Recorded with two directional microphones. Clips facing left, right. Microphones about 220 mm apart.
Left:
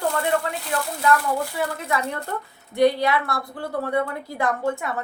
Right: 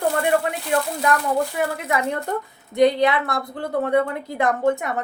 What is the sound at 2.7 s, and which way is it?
A woman's voice, 20° right (ahead or behind).